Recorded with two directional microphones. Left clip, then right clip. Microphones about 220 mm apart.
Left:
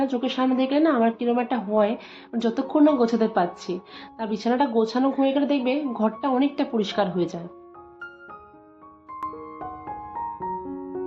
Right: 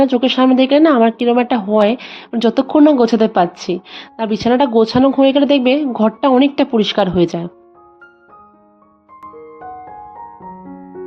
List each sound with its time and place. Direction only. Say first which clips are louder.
0.0 s speech: right 12 dB; 45° right (ahead or behind)